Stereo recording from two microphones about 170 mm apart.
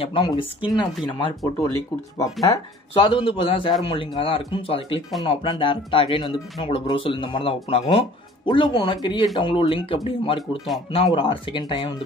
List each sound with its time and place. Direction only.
0.0 s speech: 30° left (ahead or behind)
2.5 s speech: 30° left (ahead or behind)